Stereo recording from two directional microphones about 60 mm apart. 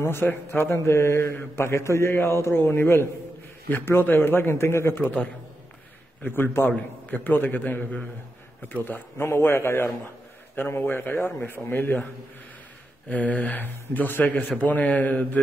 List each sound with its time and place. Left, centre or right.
0.0 s a man's voice: left
0.8 s a man's voice: left
6.2 s a man's voice: left
9.2 s a man's voice: left
13.1 s speech: left